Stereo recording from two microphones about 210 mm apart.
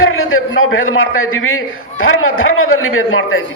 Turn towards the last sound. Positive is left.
turn(degrees=75)  # may be behind; listen again after turning